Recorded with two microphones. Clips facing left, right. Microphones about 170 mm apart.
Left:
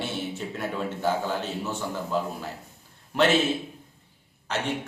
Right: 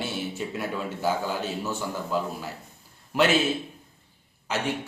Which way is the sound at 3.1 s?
5° right (ahead or behind).